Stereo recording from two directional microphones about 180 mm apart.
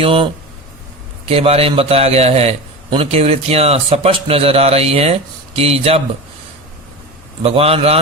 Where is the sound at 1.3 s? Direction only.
35° right (ahead or behind).